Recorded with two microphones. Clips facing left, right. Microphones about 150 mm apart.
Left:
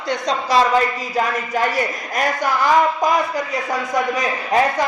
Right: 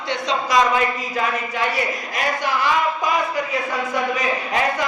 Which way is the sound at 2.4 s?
45° left (ahead or behind).